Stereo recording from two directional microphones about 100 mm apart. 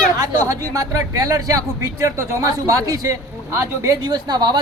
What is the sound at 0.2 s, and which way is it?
A man's voice, 35° right (ahead or behind).